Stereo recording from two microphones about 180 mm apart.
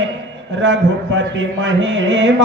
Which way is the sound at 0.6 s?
90° right.